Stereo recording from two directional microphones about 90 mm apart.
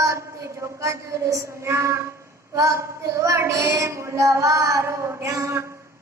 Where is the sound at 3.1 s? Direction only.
35° right (ahead or behind).